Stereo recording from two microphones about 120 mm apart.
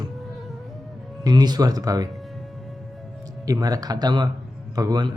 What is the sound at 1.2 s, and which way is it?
Speech, 35° right (ahead or behind).